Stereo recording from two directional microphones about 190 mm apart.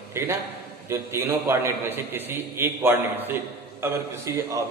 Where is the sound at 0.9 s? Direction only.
15° right (ahead or behind).